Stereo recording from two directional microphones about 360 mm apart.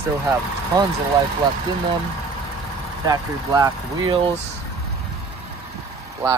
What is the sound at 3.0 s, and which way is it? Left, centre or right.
Speech, centre.